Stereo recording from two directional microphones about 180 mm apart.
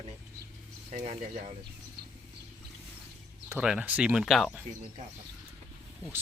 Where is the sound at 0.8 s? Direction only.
40° right (ahead or behind).